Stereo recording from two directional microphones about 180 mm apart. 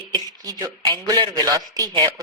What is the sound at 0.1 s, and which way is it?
A woman's voice, 20° right (ahead or behind).